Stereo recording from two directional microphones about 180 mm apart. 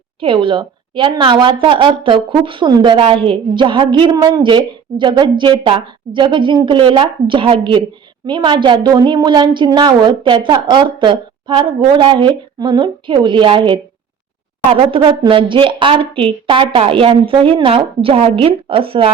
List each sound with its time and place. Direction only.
0.2 s a woman's voice: 30° right (ahead or behind)